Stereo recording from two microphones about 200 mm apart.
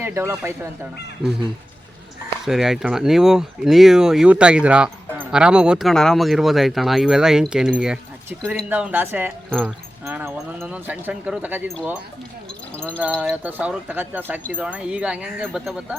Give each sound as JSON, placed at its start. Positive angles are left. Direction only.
{"t": 0.0, "sound": "speech", "side_deg": -10}
{"t": 1.2, "sound": "speech", "side_deg": -25}
{"t": 2.4, "sound": "speech", "side_deg": 0}
{"t": 9.5, "sound": "speech", "side_deg": 0}
{"t": 10.1, "sound": "speech", "side_deg": -10}
{"t": 13.1, "sound": "speech", "side_deg": 0}